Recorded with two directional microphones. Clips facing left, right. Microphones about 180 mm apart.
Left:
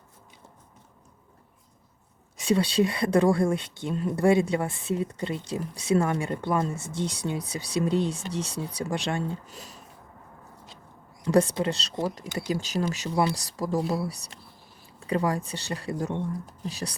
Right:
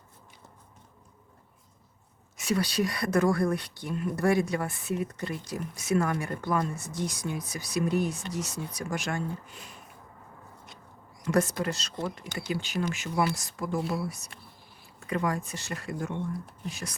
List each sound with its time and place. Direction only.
2.4 s speech: 30° left (ahead or behind)
11.3 s speech: 30° left (ahead or behind)